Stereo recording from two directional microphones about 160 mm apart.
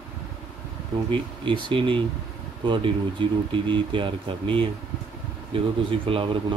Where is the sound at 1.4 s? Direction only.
30° right (ahead or behind).